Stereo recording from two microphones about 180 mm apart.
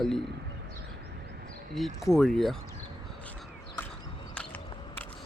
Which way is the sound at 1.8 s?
Centre (ahead or behind).